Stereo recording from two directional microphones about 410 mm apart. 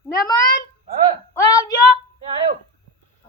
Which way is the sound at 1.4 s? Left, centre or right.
Centre.